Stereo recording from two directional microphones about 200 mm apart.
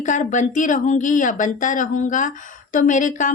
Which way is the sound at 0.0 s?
40° left (ahead or behind).